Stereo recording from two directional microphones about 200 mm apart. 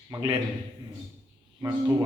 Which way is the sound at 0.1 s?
25° right (ahead or behind).